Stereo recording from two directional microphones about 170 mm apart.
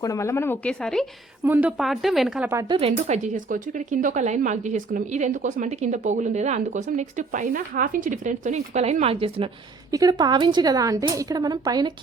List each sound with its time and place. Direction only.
0.0 s speech: 20° left (ahead or behind)
1.5 s speech: 10° right (ahead or behind)
1.8 s a woman's voice: centre (ahead or behind)
2.6 s speech: 35° right (ahead or behind)
9.9 s a woman's voice: 20° right (ahead or behind)